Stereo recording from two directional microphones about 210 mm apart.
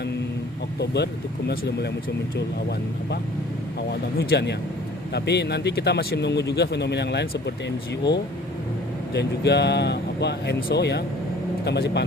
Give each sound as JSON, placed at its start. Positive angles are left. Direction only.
{"t": 0.8, "sound": "speech", "side_deg": 50}
{"t": 4.2, "sound": "speech", "side_deg": 50}
{"t": 9.1, "sound": "speech", "side_deg": 55}